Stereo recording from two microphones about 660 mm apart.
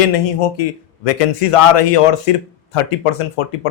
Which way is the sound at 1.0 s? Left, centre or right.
Left.